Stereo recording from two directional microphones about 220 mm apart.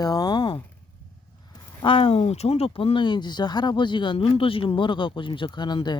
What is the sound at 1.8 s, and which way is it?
Speech, 25° left (ahead or behind).